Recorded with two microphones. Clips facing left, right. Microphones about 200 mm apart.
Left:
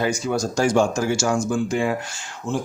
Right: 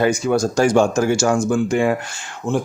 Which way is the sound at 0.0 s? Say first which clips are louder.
Right 5 dB; 60° right (ahead or behind).